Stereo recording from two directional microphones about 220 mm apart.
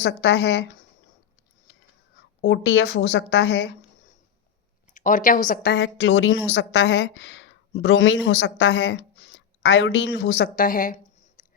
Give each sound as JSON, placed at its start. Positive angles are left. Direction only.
{"t": 0.0, "sound": "a woman's voice", "side_deg": 50}
{"t": 2.1, "sound": "a woman's voice", "side_deg": 50}
{"t": 4.9, "sound": "a woman's voice", "side_deg": 35}